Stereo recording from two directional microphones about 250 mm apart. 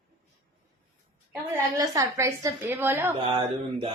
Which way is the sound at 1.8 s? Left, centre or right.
Centre.